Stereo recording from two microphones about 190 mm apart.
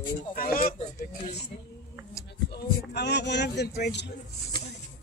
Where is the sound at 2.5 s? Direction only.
60° left (ahead or behind).